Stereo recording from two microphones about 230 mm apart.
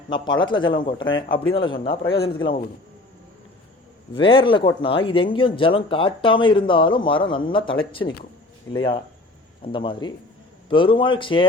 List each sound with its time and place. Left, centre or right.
0.1 s speech: centre
4.1 s speech: left